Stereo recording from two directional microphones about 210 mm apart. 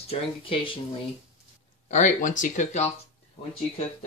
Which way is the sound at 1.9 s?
35° left (ahead or behind).